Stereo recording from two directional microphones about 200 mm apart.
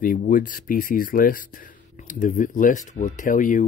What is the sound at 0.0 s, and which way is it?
Speech, 45° left (ahead or behind).